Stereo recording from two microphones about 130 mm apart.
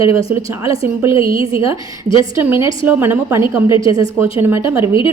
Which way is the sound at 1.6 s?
25° right (ahead or behind).